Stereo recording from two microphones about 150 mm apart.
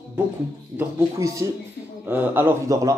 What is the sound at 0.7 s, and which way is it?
Speech, 20° right (ahead or behind).